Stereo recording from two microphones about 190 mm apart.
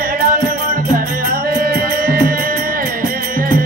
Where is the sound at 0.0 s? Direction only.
45° right (ahead or behind).